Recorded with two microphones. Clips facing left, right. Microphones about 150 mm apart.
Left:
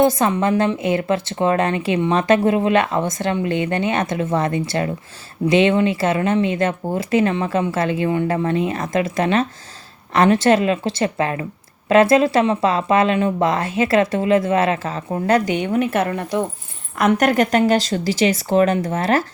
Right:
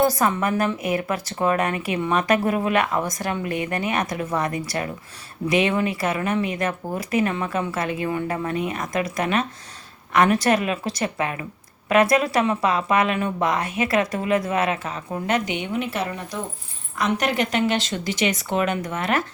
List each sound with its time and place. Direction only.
0.0 s a woman's voice: 20° left (ahead or behind)